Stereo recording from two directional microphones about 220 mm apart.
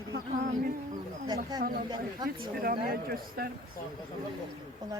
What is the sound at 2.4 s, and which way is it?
Speech, 45° right (ahead or behind).